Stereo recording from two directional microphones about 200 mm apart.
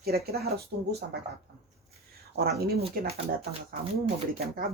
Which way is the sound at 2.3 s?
50° right (ahead or behind).